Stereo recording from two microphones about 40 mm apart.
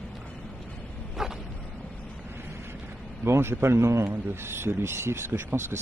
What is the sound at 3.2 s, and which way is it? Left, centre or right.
Speech, right.